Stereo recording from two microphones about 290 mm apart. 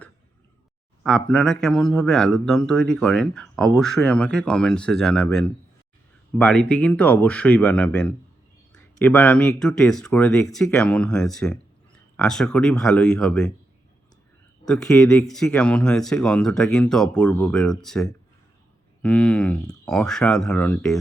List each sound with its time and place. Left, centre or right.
1.0 s speech: centre
14.7 s speech: centre